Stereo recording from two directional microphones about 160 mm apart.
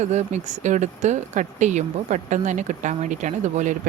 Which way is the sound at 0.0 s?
45° right (ahead or behind).